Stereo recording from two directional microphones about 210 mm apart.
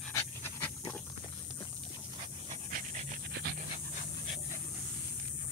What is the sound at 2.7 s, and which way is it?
Pant, 35° right (ahead or behind).